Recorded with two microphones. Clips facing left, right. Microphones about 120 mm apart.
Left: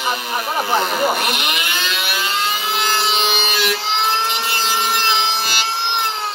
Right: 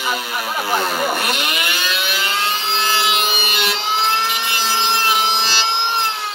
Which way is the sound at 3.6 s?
20° right (ahead or behind).